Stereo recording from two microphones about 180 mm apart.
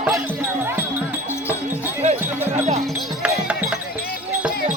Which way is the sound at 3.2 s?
5° right (ahead or behind).